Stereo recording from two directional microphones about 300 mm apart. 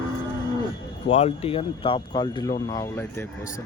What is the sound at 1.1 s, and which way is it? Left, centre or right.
Speech, centre.